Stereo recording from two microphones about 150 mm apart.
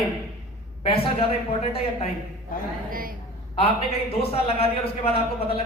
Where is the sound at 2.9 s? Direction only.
70° right (ahead or behind).